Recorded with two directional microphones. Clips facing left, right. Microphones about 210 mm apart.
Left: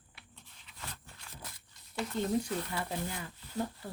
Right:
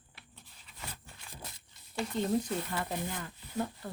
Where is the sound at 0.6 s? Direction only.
5° right (ahead or behind).